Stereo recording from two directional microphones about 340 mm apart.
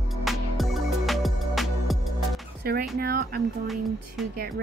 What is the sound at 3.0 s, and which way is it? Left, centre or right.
Speech, right.